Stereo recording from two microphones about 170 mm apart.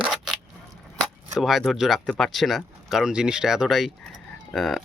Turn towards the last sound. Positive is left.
turn(degrees=0)  # may be behind; listen again after turning